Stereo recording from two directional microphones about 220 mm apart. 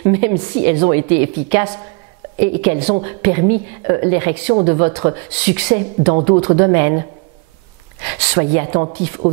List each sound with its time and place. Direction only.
0.1 s a woman's voice: 15° right (ahead or behind)
6.1 s speech: 25° right (ahead or behind)
8.1 s a woman's voice: 15° right (ahead or behind); by 9.4 s 35° right (ahead or behind)